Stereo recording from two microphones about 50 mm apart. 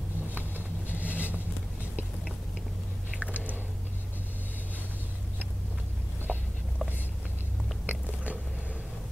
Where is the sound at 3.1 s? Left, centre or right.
Right.